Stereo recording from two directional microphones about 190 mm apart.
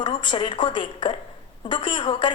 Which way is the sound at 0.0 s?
25° left (ahead or behind).